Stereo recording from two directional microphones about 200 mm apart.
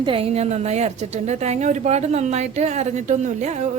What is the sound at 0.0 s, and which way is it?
A woman's voice, 25° right (ahead or behind).